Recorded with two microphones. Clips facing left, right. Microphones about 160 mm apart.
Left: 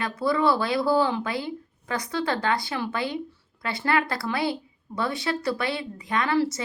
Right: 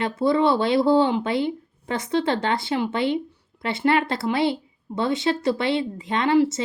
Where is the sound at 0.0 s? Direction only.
25° right (ahead or behind).